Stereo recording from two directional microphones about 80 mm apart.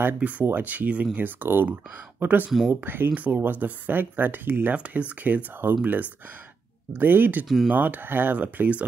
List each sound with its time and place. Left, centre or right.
0.0 s speech: centre
6.9 s speech: right
7.4 s speech: centre
7.7 s speech: right